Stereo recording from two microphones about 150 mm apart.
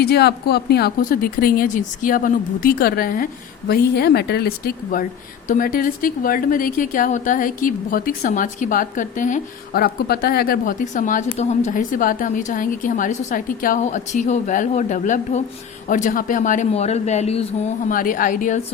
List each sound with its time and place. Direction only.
0.0 s speech: 90° left; by 3.2 s 70° left (ahead or behind)
3.7 s speech: 90° left
5.5 s speech: 70° left (ahead or behind); by 17.7 s 45° left (ahead or behind)
17.8 s speech: 65° left (ahead or behind)